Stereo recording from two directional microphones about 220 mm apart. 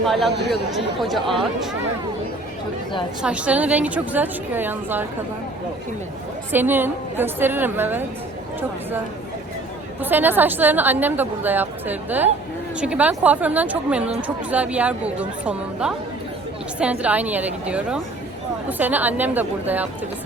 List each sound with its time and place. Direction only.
0.0 s speech: centre (ahead or behind)
3.2 s a woman's voice: 5° right (ahead or behind)
6.5 s a woman's voice: 10° right (ahead or behind)
10.0 s a woman's voice: 10° right (ahead or behind)